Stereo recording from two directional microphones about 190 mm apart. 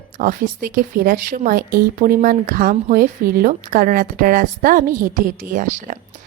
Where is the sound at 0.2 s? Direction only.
45° right (ahead or behind).